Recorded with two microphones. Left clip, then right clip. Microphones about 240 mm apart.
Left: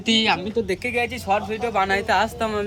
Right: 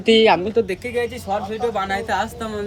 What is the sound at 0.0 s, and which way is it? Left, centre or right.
Speech, centre.